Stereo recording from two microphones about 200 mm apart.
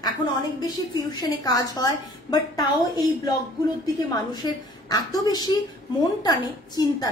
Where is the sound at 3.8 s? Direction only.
20° left (ahead or behind).